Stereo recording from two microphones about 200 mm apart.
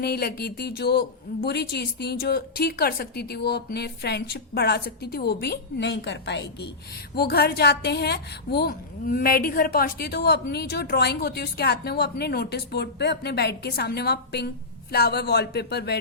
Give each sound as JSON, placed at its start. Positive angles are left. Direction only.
{"t": 0.0, "sound": "a woman's voice", "side_deg": 50}